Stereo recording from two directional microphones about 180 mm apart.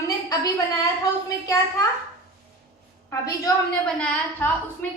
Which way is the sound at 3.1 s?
20° left (ahead or behind).